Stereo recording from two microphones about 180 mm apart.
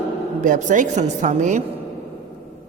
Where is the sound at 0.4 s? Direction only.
45° right (ahead or behind).